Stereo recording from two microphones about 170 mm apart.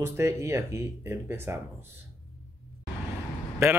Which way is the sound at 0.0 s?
15° right (ahead or behind).